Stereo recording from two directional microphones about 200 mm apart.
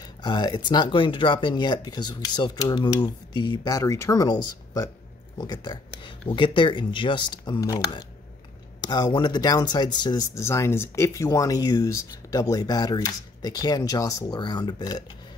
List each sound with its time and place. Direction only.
0.2 s speech: 20° left (ahead or behind)